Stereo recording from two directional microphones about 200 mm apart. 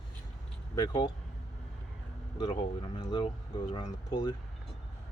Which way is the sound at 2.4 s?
25° left (ahead or behind).